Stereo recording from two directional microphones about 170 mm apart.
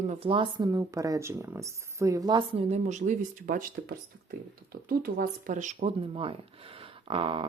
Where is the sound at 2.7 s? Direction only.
45° right (ahead or behind).